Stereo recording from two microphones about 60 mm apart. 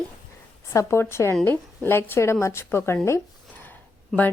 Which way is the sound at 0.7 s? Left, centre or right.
Left.